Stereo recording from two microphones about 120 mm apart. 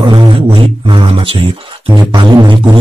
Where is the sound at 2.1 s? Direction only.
40° right (ahead or behind).